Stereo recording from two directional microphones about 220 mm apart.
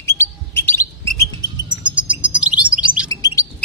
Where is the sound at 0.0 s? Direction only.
10° left (ahead or behind).